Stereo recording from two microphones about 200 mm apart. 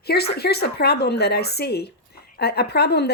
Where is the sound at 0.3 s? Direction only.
55° left (ahead or behind).